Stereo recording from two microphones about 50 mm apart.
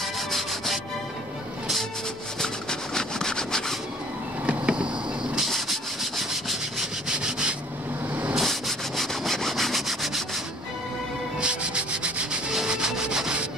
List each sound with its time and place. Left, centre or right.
0.0 s rub: centre
2.4 s rub: centre
4.5 s a sound: right
5.4 s rub: centre
7.2 s rub: centre
8.1 s a sound: right
8.4 s rub: centre
11.3 s rub: right